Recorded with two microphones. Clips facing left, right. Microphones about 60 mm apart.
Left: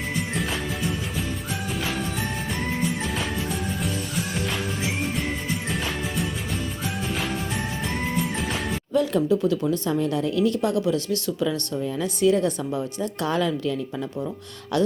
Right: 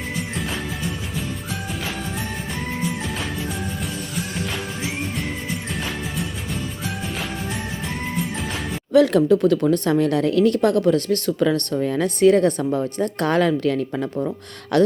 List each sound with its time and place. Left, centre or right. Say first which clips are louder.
8.9 s speech: right 7 dB; right